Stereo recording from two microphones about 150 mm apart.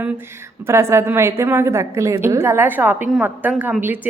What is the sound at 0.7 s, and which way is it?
A woman's voice, 20° right (ahead or behind).